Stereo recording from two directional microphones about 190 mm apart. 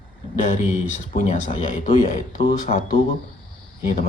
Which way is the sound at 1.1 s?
40° left (ahead or behind).